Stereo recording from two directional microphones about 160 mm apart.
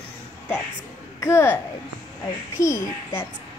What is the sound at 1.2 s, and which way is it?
Speech, 15° left (ahead or behind).